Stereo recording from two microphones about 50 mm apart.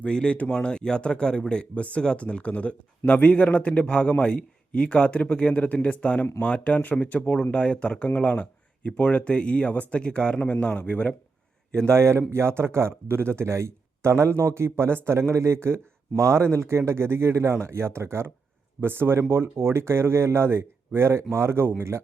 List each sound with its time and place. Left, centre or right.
0.0 s speech: centre
11.9 s speech: right